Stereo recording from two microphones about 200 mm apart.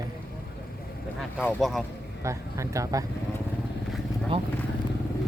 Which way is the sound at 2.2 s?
15° right (ahead or behind).